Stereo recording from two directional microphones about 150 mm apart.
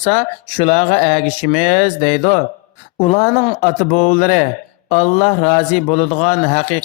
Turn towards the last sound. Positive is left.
turn(degrees=50)  # may be behind; listen again after turning